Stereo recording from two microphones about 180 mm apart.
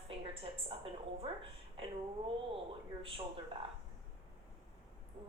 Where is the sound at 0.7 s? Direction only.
30° right (ahead or behind).